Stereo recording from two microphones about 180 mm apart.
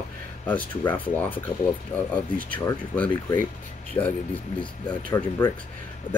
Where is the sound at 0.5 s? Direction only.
10° left (ahead or behind).